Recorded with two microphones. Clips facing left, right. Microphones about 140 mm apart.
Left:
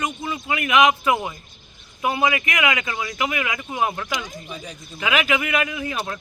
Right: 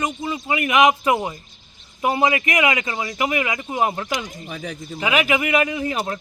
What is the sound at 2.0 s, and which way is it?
Speech, 35° right (ahead or behind).